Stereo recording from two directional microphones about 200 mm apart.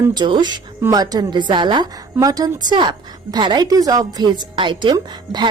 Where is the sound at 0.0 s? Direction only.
20° right (ahead or behind).